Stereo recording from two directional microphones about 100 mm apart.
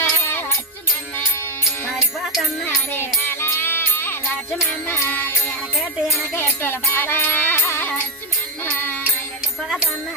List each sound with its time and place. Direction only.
0.0 s music: 20° left (ahead or behind)
1.9 s music: 5° right (ahead or behind)
3.0 s music: 25° left (ahead or behind)